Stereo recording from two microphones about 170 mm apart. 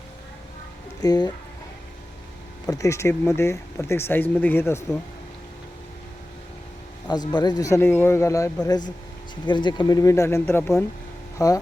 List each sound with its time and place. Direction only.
1.0 s speech: 25° left (ahead or behind)
2.6 s speech: 20° left (ahead or behind)
7.1 s speech: 25° left (ahead or behind)